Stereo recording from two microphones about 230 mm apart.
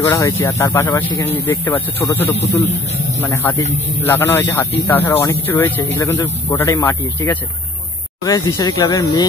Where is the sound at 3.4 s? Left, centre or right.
Centre.